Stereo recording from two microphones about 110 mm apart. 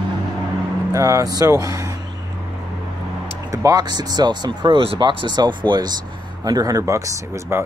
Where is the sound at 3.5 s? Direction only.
35° right (ahead or behind).